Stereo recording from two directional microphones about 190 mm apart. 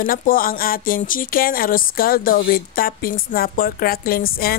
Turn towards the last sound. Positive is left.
turn(degrees=50)  # may be behind; listen again after turning